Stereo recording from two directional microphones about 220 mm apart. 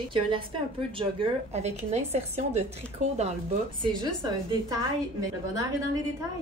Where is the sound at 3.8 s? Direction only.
20° right (ahead or behind).